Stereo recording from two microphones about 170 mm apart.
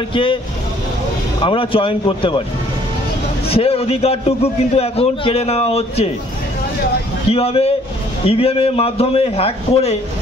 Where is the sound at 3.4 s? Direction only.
35° left (ahead or behind).